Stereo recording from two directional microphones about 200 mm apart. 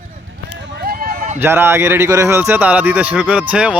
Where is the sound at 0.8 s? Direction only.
45° right (ahead or behind).